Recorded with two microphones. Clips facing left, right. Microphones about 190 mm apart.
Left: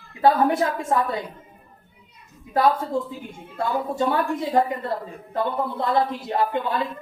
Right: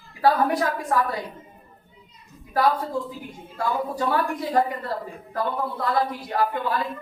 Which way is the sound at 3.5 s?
25° left (ahead or behind).